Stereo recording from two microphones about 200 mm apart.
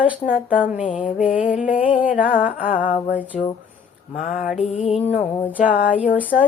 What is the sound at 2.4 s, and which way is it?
Music, 45° left (ahead or behind).